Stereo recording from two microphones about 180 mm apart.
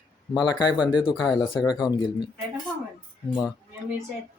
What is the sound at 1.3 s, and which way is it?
Speech, 25° left (ahead or behind).